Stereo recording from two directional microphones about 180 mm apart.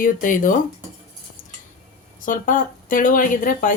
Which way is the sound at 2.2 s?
45° left (ahead or behind).